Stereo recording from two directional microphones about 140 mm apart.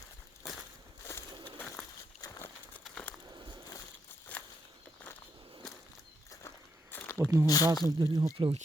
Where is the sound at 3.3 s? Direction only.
30° right (ahead or behind).